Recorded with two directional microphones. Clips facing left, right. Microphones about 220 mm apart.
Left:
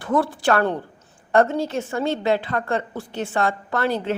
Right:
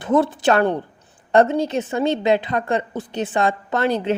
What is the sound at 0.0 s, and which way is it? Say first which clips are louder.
A woman's voice: right 4 dB; 20° right (ahead or behind).